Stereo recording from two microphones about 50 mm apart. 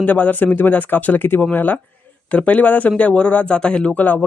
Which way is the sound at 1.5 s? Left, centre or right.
Left.